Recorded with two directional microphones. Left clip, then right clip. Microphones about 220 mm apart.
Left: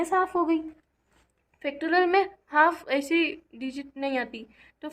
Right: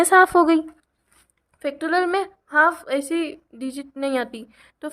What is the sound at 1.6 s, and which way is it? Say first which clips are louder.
A woman's voice: right 3 dB; 35° right (ahead or behind).